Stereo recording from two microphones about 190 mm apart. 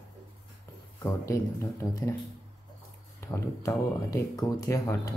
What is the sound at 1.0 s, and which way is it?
Speech, 15° left (ahead or behind).